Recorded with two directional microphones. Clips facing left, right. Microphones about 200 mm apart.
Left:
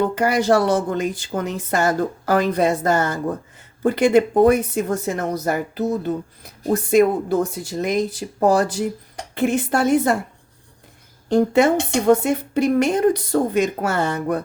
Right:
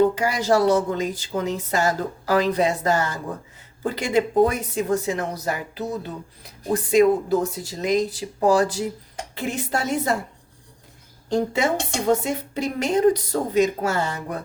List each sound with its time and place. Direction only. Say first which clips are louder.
0.2 s a woman's voice: left 3 dB; 55° left (ahead or behind)
11.3 s a woman's voice: left 6 dB; 60° left (ahead or behind)